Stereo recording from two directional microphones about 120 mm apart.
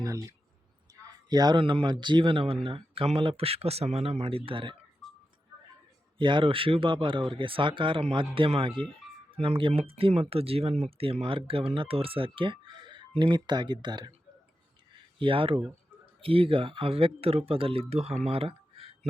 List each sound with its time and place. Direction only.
0.0 s speech: 25° right (ahead or behind); by 4.8 s 45° right (ahead or behind)
6.1 s speech: 45° right (ahead or behind)
15.2 s speech: 45° right (ahead or behind)
18.3 s a sound: 50° right (ahead or behind)